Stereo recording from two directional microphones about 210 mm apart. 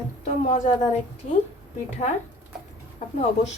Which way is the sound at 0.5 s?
35° left (ahead or behind).